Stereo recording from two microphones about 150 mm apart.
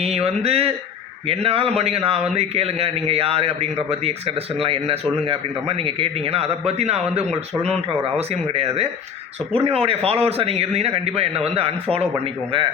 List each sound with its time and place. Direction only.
0.0 s a man's voice: 45° right (ahead or behind)